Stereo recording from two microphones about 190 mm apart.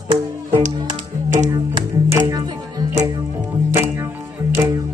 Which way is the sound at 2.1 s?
20° right (ahead or behind).